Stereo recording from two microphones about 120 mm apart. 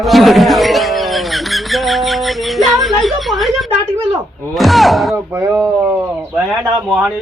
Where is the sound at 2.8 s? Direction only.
Centre (ahead or behind).